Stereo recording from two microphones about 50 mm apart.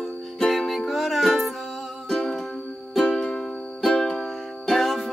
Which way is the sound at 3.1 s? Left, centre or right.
Centre.